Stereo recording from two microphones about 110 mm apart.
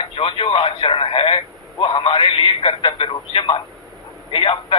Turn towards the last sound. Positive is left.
turn(degrees=50)  # may be behind; listen again after turning